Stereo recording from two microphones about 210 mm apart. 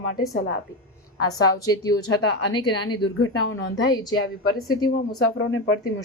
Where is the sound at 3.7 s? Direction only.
20° left (ahead or behind).